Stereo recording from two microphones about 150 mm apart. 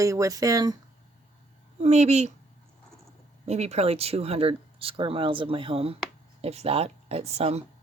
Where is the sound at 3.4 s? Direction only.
45° right (ahead or behind).